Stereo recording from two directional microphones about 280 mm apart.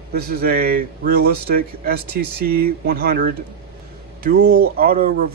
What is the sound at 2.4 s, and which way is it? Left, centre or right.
Speech, right.